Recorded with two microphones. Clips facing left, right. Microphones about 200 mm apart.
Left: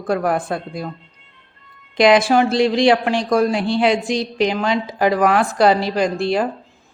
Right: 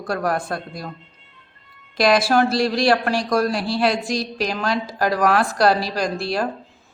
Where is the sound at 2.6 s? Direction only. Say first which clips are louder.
Left 4 dB; 15° left (ahead or behind).